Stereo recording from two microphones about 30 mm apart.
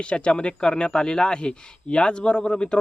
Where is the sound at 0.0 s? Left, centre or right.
Left.